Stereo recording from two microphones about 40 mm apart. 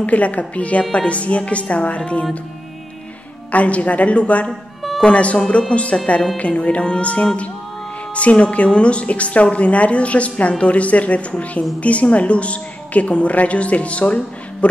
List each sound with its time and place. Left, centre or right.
0.0 s a woman's voice: left
3.5 s a woman's voice: left
4.5 s music: centre
5.0 s a woman's voice: left